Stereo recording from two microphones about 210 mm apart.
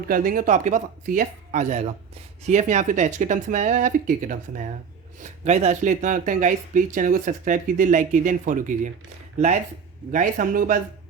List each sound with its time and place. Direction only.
0.1 s speech: 40° right (ahead or behind)